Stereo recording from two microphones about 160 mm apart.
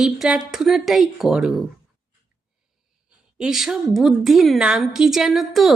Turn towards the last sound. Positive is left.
turn(degrees=0)  # may be behind; listen again after turning